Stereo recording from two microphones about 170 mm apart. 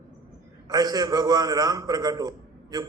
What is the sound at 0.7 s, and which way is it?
A man's voice, 25° right (ahead or behind).